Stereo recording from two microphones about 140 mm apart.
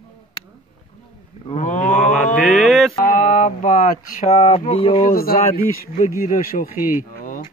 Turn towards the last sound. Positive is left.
turn(degrees=70)  # may be behind; listen again after turning